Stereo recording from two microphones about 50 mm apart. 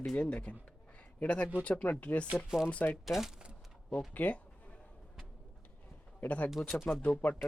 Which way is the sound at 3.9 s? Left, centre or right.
Left.